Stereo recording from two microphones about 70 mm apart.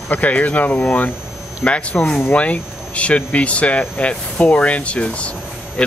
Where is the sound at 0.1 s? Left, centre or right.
Left.